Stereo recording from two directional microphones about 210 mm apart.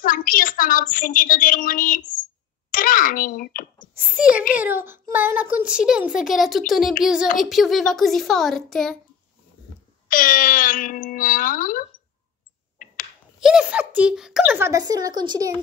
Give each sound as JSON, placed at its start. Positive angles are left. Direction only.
{"t": 0.0, "sound": "a woman's voice", "side_deg": 40}
{"t": 3.9, "sound": "a sound", "side_deg": -5}
{"t": 4.6, "sound": "a child's voice", "side_deg": -10}
{"t": 10.0, "sound": "speech", "side_deg": 40}
{"t": 13.4, "sound": "a child's voice", "side_deg": -5}
{"t": 14.7, "sound": "a child's voice", "side_deg": -20}